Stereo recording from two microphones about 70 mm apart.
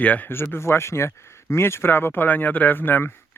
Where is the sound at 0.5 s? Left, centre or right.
Left.